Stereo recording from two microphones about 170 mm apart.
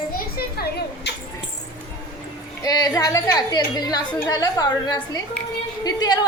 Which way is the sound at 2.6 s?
25° left (ahead or behind).